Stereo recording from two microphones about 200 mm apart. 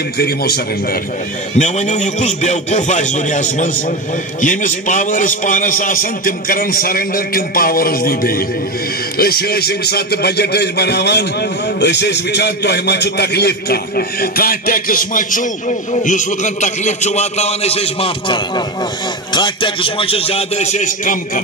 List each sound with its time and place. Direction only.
0.2 s a man's voice: 50° left (ahead or behind)
1.6 s a man's voice: 35° left (ahead or behind)